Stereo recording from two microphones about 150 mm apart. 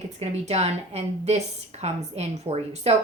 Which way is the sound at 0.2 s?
45° right (ahead or behind).